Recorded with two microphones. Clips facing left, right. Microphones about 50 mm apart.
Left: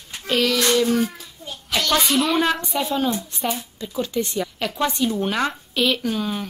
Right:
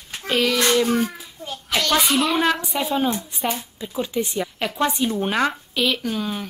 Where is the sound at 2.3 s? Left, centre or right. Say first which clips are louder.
Even; centre.